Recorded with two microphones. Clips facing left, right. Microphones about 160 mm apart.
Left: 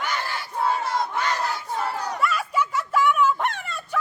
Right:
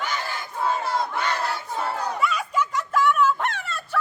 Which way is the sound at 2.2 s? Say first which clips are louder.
Left 2 dB; centre (ahead or behind).